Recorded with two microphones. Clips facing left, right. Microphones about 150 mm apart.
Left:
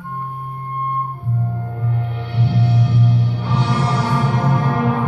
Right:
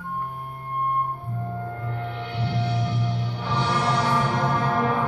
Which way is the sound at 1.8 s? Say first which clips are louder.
Left 6 dB; 20° left (ahead or behind).